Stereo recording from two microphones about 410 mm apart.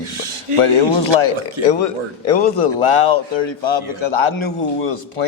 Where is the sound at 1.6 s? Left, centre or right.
Right.